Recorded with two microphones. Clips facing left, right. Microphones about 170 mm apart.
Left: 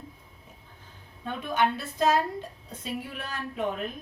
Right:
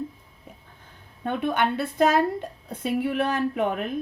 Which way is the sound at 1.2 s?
60° right (ahead or behind).